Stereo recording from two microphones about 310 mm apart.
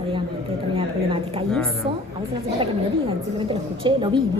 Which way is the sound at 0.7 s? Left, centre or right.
Centre.